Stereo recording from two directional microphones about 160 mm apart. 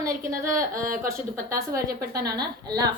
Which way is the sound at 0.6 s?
60° right (ahead or behind).